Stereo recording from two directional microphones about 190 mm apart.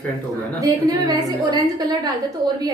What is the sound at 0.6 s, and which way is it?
A woman's voice, 20° right (ahead or behind).